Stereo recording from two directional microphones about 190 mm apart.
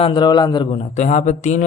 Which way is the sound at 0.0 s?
25° left (ahead or behind).